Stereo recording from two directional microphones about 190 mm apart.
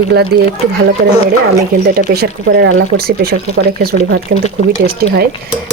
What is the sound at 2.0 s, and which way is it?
Speech, 55° right (ahead or behind).